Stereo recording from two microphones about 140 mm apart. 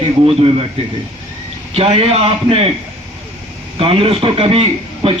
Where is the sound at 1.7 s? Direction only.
45° right (ahead or behind).